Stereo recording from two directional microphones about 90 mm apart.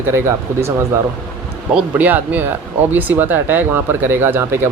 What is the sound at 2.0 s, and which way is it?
Speech, 20° right (ahead or behind).